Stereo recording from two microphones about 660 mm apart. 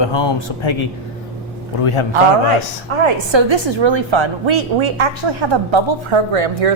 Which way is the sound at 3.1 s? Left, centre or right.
Right.